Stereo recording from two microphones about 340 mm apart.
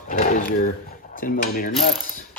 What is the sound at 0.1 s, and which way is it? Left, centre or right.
Speech, left.